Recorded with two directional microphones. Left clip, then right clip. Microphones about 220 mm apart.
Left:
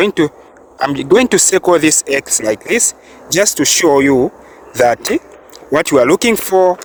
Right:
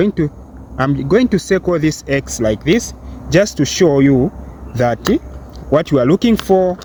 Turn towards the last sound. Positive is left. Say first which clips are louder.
# left 2 dB
turn(degrees=55)  # may be behind; listen again after turning